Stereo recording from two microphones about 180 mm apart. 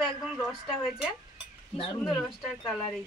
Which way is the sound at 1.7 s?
30° left (ahead or behind).